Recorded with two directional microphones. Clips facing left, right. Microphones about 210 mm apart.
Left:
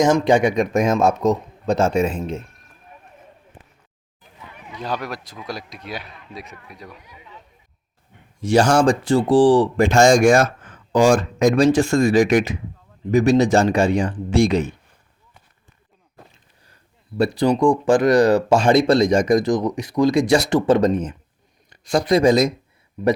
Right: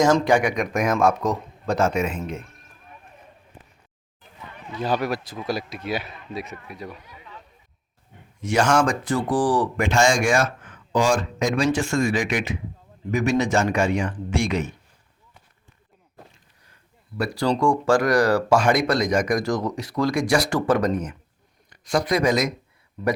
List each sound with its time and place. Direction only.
0.0 s speech: 20° left (ahead or behind)
4.2 s a sound: 10° left (ahead or behind)
4.7 s speech: 5° right (ahead or behind)
7.0 s a sound: 15° left (ahead or behind)
8.4 s speech: 30° left (ahead or behind)
17.2 s speech: 20° left (ahead or behind)
23.0 s speech: 15° left (ahead or behind)